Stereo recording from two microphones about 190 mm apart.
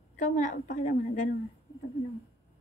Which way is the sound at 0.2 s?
40° left (ahead or behind).